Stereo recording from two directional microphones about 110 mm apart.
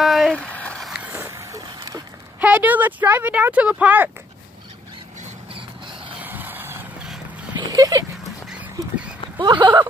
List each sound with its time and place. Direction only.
0.0 s a sound: centre (ahead or behind)
0.8 s vehicle: 10° right (ahead or behind); by 2.0 s 30° right (ahead or behind)
2.4 s speech: 15° right (ahead or behind)
6.2 s vehicle: 15° right (ahead or behind)
7.5 s a sound: 30° right (ahead or behind)
9.4 s speech: 45° right (ahead or behind)